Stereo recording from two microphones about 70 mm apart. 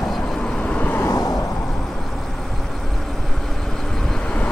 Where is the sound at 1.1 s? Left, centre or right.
Left.